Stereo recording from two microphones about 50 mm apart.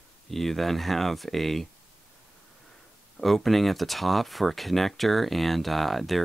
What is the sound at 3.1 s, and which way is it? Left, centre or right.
Speech, centre.